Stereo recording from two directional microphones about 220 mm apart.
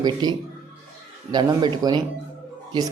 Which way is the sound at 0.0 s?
20° right (ahead or behind).